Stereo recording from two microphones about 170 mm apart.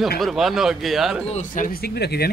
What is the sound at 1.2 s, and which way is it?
Speech, 45° left (ahead or behind).